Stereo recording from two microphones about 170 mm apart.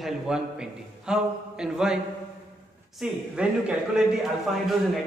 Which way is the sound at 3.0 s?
5° right (ahead or behind).